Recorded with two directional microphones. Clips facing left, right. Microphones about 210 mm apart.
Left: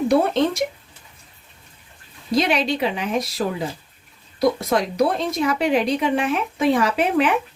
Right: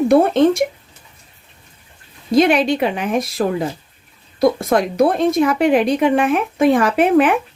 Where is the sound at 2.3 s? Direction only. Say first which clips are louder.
Right 6 dB; 50° right (ahead or behind).